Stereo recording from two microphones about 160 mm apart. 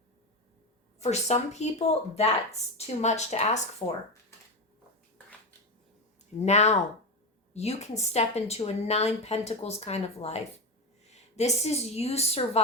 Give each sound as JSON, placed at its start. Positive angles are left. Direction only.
{"t": 0.9, "sound": "speech", "side_deg": 45}
{"t": 6.4, "sound": "a woman's voice", "side_deg": 45}